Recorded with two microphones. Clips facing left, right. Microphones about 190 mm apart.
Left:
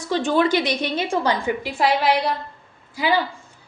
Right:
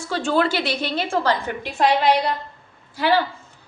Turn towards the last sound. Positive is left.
turn(degrees=10)  # may be behind; listen again after turning